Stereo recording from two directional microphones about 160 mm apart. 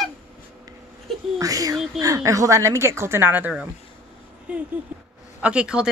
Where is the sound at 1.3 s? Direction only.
20° right (ahead or behind).